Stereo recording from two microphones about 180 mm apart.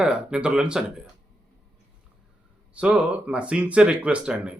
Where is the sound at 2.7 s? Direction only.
5° right (ahead or behind).